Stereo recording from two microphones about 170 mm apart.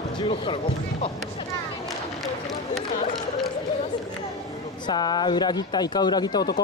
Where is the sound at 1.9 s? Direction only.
Centre (ahead or behind).